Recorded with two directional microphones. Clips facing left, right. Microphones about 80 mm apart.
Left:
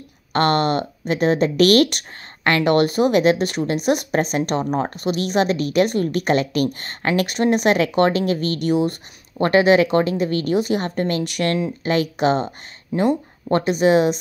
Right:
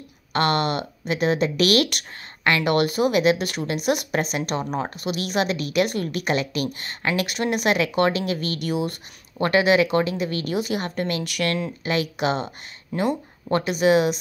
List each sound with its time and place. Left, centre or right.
0.3 s speech: left